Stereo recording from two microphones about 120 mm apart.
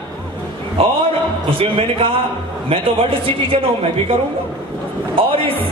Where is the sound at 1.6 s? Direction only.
50° right (ahead or behind).